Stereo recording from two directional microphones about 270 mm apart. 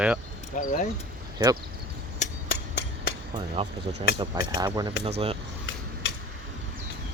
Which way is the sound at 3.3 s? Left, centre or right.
Centre.